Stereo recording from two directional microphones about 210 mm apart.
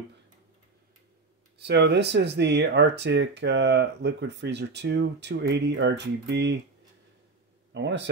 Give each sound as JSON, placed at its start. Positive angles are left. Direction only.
{"t": 1.6, "sound": "speech", "side_deg": -55}
{"t": 7.7, "sound": "speech", "side_deg": -55}